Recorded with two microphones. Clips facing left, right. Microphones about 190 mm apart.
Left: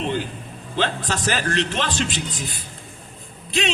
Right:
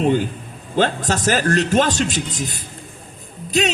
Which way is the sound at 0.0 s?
45° right (ahead or behind).